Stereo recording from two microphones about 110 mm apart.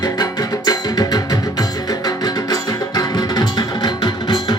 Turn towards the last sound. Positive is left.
turn(degrees=40)  # may be behind; listen again after turning